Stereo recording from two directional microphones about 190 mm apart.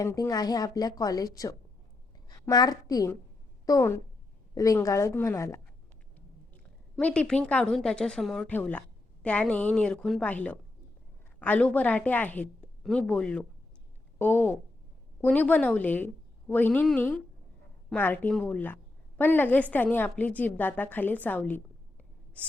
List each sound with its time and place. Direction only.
0.0 s a woman's voice: 15° left (ahead or behind)
6.9 s a woman's voice: 5° left (ahead or behind)
22.4 s a sound: 5° left (ahead or behind)